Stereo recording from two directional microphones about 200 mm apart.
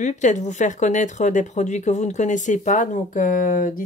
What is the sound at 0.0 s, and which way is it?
Speech, 35° left (ahead or behind).